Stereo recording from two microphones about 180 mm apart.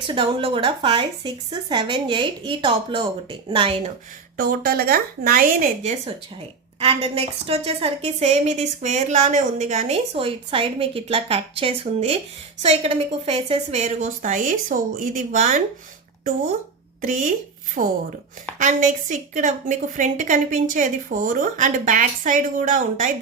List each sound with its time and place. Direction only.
0.1 s a woman's voice: 30° right (ahead or behind)
4.4 s speech: 60° right (ahead or behind)
6.7 s a woman's voice: 35° right (ahead or behind)
17.0 s a woman's voice: 45° right (ahead or behind)